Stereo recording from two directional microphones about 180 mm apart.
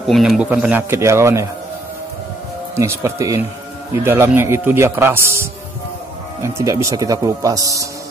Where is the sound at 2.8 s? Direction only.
15° right (ahead or behind).